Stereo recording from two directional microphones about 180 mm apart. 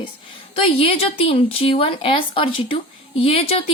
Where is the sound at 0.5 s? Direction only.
30° left (ahead or behind).